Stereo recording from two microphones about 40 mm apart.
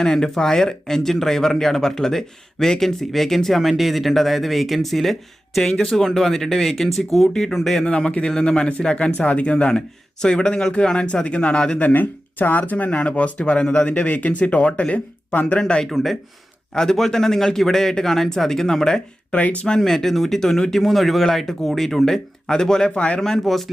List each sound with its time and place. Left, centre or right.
0.0 s speech: centre
7.9 s speech: left
11.8 s speech: left
12.9 s speech: left
14.1 s speech: left
15.6 s speech: left
23.0 s speech: left
23.4 s speech: centre